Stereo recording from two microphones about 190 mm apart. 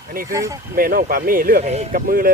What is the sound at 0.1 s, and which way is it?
Speech, 50° right (ahead or behind).